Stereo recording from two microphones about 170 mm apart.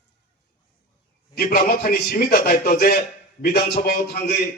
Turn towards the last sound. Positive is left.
turn(degrees=60)  # may be behind; listen again after turning